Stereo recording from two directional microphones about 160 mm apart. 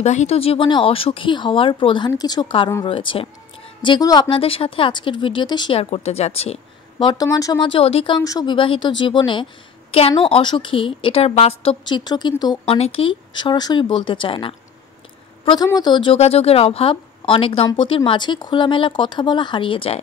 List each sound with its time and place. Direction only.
0.0 s a woman's voice: 45° left (ahead or behind)
8.2 s a woman's voice: 25° left (ahead or behind)
12.6 s a woman's voice: 40° left (ahead or behind)